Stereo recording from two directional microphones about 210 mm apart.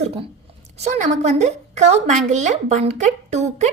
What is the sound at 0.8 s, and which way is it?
A woman's voice, 35° right (ahead or behind).